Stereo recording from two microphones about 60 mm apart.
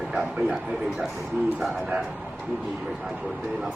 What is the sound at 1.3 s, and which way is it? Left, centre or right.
Speech, centre.